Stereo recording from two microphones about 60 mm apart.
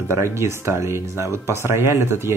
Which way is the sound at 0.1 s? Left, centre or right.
Right.